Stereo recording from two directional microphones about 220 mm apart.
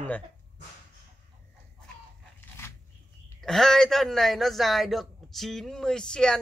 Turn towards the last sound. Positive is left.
turn(degrees=5)  # may be behind; listen again after turning